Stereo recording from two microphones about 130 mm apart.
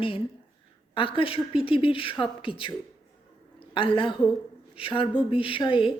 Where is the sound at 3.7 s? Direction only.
40° left (ahead or behind).